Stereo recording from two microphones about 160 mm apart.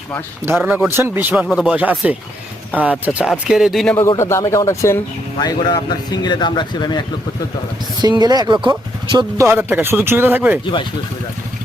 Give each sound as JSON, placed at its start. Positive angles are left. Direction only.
{"t": 0.5, "sound": "speech", "side_deg": -5}
{"t": 4.1, "sound": "speech", "side_deg": 15}
{"t": 8.0, "sound": "speech", "side_deg": -25}
{"t": 9.5, "sound": "speech", "side_deg": -15}